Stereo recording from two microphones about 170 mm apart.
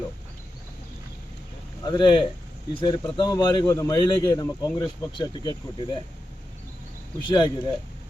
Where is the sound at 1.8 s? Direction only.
25° left (ahead or behind).